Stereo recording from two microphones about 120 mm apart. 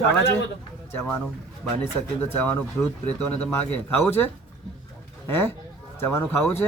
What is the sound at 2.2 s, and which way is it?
Speech, 15° left (ahead or behind).